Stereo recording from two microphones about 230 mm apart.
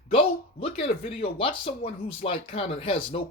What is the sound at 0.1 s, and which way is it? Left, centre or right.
Speech, left.